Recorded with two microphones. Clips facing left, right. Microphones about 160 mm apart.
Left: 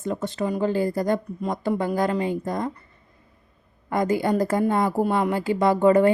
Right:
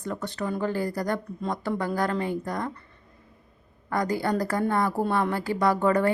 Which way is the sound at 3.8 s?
20° left (ahead or behind).